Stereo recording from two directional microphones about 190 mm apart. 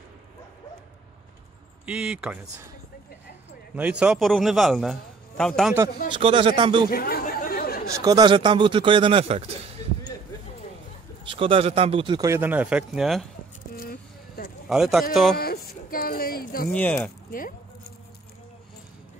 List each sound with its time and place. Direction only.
1.9 s a man's voice: 5° right (ahead or behind)
3.7 s a man's voice: 5° right (ahead or behind)
6.1 s a man's voice: 30° right (ahead or behind)
6.9 s chatter: 50° left (ahead or behind)
7.9 s a man's voice: 20° right (ahead or behind)
11.2 s a man's voice: 30° right (ahead or behind); by 13.3 s centre (ahead or behind)
13.7 s a sound: 50° left (ahead or behind)
14.7 s a man's voice: centre (ahead or behind)
15.3 s music: 55° left (ahead or behind)
15.9 s a sound: 50° left (ahead or behind)
16.7 s speech: 5° left (ahead or behind)
17.3 s speech: 50° left (ahead or behind)